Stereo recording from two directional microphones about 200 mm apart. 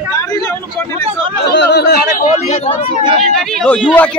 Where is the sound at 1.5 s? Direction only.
60° left (ahead or behind).